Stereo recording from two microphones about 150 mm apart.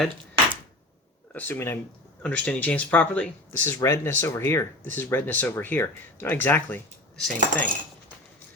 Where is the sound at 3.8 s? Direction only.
20° left (ahead or behind).